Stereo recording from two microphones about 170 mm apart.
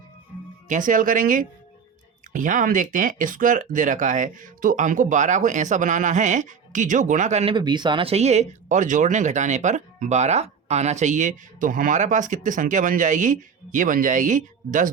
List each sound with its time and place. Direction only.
0.7 s speech: 50° right (ahead or behind)
7.5 s speech: 25° right (ahead or behind); by 14.8 s 50° right (ahead or behind)